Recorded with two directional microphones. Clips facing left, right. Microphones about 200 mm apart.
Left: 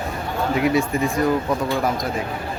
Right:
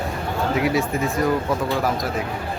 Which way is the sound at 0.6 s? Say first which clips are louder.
Left 3 dB; centre (ahead or behind).